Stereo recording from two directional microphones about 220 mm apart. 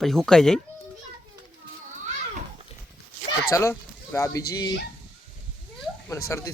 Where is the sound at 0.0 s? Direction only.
Centre (ahead or behind).